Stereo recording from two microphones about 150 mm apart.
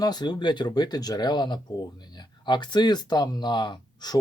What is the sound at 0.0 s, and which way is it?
Speech, 25° left (ahead or behind).